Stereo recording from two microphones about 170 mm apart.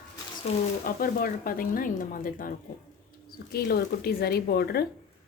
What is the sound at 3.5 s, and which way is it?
Speech, 65° left (ahead or behind).